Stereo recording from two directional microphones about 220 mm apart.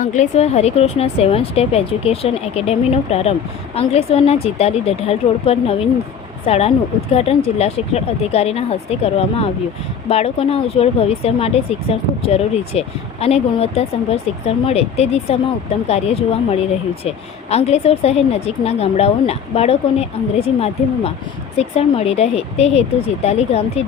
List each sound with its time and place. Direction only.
0.0 s speech: 35° left (ahead or behind)